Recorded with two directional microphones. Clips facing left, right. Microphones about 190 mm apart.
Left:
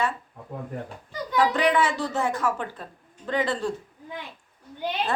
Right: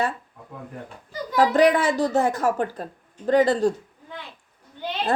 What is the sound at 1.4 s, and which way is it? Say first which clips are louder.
A woman's voice: right 4 dB; 40° right (ahead or behind).